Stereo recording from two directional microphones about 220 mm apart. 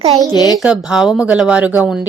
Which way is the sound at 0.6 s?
5° right (ahead or behind).